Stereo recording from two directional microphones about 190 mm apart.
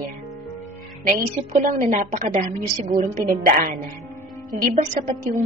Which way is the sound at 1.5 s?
45° right (ahead or behind).